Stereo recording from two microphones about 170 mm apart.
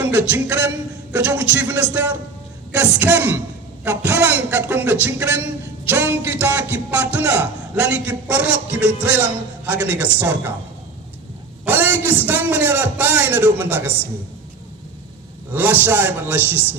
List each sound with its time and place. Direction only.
0.0 s speech: 10° right (ahead or behind)
11.6 s a sound: 10° right (ahead or behind)
12.2 s speech: 10° right (ahead or behind)
15.5 s speech: 10° right (ahead or behind)